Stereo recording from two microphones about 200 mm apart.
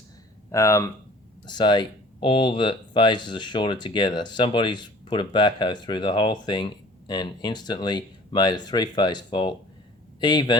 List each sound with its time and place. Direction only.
0.5 s speech: 15° left (ahead or behind)